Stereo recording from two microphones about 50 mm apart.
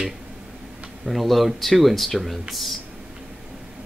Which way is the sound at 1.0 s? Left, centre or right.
Centre.